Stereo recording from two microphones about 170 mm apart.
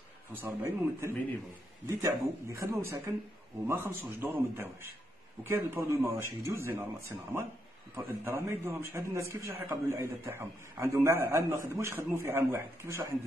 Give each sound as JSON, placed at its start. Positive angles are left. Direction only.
{"t": 0.3, "sound": "a man's voice", "side_deg": -15}
{"t": 2.5, "sound": "a man's voice", "side_deg": -15}